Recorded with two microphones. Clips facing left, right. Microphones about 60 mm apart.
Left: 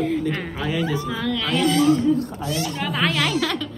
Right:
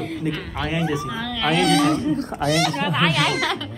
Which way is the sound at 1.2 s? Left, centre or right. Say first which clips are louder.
Right 1 dB; centre.